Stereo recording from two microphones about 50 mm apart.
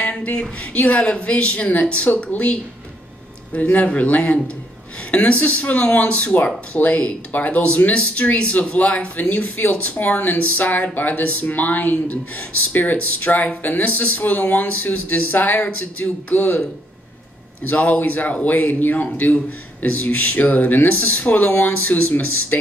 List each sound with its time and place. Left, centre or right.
0.0 s speech: left
17.6 s speech: left